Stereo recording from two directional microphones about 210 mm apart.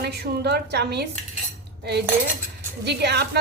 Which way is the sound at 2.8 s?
50° right (ahead or behind).